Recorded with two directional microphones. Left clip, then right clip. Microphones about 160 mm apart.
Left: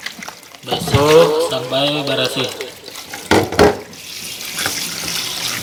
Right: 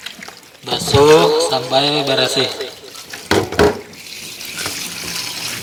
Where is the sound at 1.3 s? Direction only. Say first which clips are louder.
Right 2 dB; 30° right (ahead or behind).